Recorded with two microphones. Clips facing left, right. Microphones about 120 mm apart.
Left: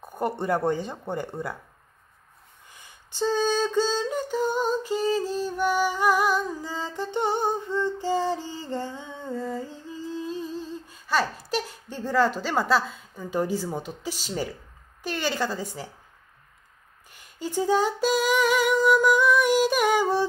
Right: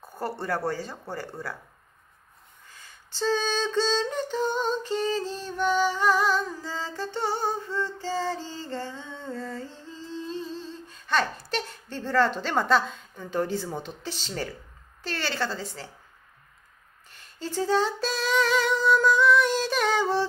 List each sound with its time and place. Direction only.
0.0 s speech: 20° left (ahead or behind)
2.7 s female singing: 15° left (ahead or behind)
15.0 s a woman's voice: 15° left (ahead or behind)
17.1 s a sound: 10° left (ahead or behind)